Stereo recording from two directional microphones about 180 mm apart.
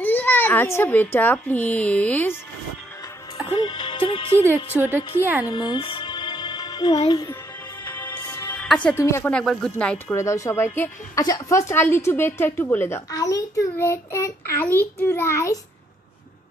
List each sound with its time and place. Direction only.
0.0 s a child's voice: 10° left (ahead or behind)
3.5 s music: 25° left (ahead or behind)
4.8 s a woman's voice: 10° right (ahead or behind)
5.5 s music: 25° left (ahead or behind)
7.8 s music: 10° left (ahead or behind)
8.5 s speech: 5° left (ahead or behind)